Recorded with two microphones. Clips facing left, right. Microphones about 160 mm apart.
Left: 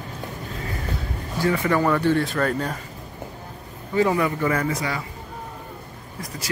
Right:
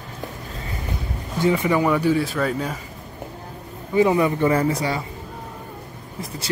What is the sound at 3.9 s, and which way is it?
Speech, 20° right (ahead or behind).